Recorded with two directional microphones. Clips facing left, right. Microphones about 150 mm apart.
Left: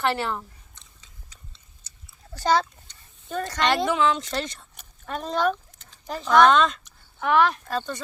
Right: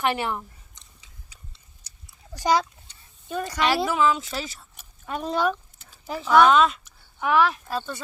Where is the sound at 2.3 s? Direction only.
10° right (ahead or behind).